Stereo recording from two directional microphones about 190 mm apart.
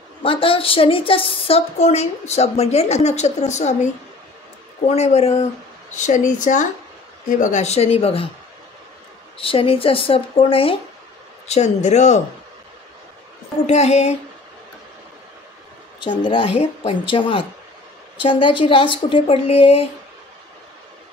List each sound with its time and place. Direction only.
0.2 s speech: 30° left (ahead or behind)
4.8 s speech: 35° left (ahead or behind)
9.4 s speech: 30° left (ahead or behind)
13.7 s speech: 35° left (ahead or behind)
16.0 s speech: 25° left (ahead or behind)